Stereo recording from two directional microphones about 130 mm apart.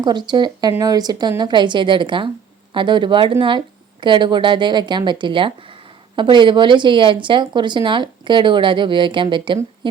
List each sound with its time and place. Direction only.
0.0 s a woman's voice: 35° right (ahead or behind)